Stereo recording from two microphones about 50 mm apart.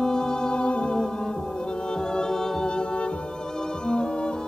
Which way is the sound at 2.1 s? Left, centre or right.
Centre.